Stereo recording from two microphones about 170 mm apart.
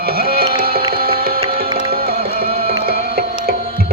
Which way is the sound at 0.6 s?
60° right (ahead or behind).